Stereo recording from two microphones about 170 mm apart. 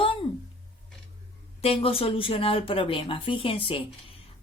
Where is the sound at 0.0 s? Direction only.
30° left (ahead or behind).